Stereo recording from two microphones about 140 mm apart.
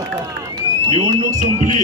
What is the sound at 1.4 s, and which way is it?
Speech, 60° right (ahead or behind).